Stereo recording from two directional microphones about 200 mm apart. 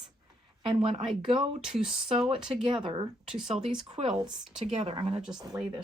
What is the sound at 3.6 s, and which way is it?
Speech, 25° right (ahead or behind).